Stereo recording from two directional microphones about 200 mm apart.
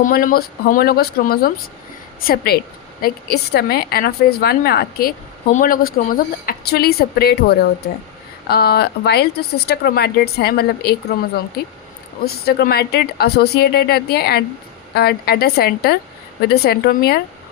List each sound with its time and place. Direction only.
0.0 s a woman's voice: 45° left (ahead or behind)